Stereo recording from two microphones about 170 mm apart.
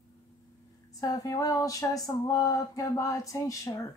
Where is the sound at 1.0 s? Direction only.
20° left (ahead or behind).